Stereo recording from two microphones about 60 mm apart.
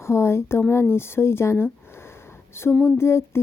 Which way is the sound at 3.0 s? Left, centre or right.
Left.